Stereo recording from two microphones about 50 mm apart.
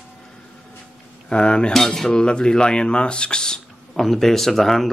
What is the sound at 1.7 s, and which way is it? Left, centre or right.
Speech, centre.